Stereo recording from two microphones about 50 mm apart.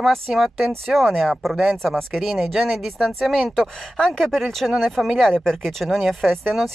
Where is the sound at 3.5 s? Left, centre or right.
Centre.